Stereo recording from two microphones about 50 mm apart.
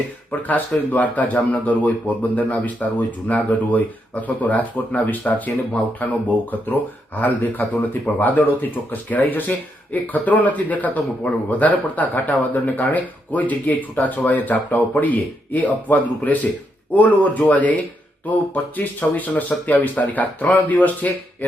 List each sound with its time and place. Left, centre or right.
0.3 s speech: left